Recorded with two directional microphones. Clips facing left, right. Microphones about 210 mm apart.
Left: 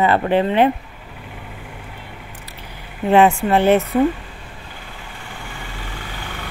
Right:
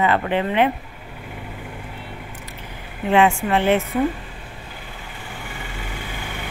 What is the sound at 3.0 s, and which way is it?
Speech, 40° left (ahead or behind).